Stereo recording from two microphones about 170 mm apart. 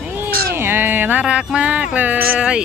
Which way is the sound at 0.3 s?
65° right (ahead or behind).